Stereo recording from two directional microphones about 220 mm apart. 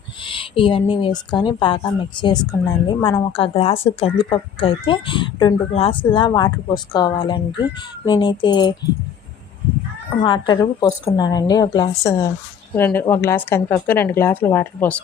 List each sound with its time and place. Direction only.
0.3 s speech: 25° left (ahead or behind)
10.2 s a woman's voice: 20° left (ahead or behind)